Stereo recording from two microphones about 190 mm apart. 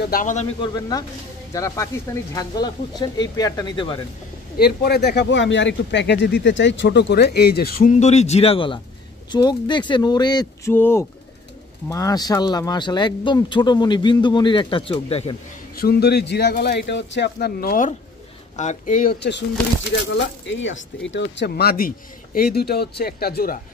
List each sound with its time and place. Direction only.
0.0 s speech: 45° left (ahead or behind)
0.6 s speech: 20° left (ahead or behind)
4.6 s speech: 55° left (ahead or behind); by 15.3 s 30° left (ahead or behind)
15.7 s speech: 55° left (ahead or behind)
19.1 s speech: 65° left (ahead or behind)
20.2 s speech: 75° left (ahead or behind); by 23.6 s 50° left (ahead or behind)